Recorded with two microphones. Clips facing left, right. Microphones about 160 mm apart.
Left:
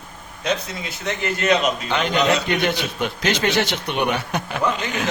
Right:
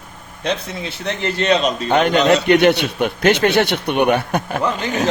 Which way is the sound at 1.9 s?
50° right (ahead or behind).